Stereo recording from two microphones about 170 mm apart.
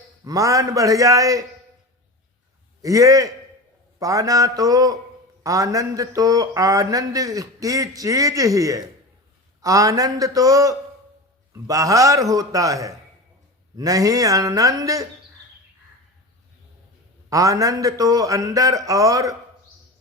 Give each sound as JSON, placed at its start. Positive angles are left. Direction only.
{"t": 0.3, "sound": "a man's voice", "side_deg": -20}
{"t": 2.8, "sound": "a man's voice", "side_deg": -20}
{"t": 17.2, "sound": "a man's voice", "side_deg": -20}